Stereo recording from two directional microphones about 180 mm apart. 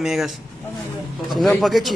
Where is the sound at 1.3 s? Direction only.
Centre (ahead or behind).